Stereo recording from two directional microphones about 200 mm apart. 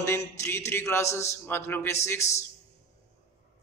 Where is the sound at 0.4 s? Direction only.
15° left (ahead or behind).